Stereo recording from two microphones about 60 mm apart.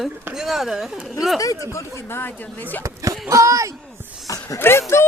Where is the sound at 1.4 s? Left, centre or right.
Left.